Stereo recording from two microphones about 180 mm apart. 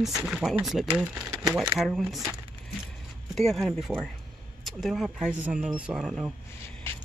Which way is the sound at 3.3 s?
Centre (ahead or behind).